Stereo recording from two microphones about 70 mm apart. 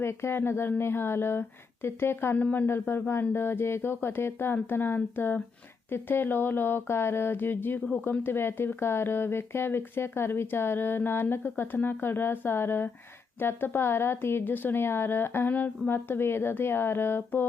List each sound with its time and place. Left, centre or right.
0.0 s speech: left